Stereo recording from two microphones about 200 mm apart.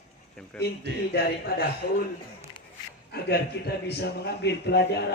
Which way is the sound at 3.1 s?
55° left (ahead or behind).